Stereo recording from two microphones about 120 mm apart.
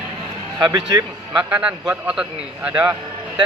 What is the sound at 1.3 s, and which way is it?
A man's voice, 10° right (ahead or behind).